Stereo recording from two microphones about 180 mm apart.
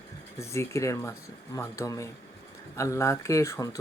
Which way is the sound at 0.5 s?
15° left (ahead or behind).